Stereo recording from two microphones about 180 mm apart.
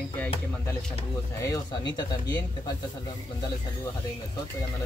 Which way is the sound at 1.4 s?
20° left (ahead or behind).